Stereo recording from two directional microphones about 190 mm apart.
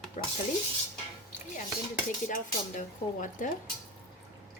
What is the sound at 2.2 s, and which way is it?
A woman's voice, 45° left (ahead or behind).